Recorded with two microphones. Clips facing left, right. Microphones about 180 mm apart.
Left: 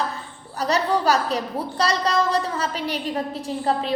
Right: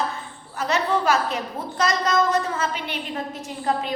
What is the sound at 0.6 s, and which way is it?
A woman's voice, 35° left (ahead or behind).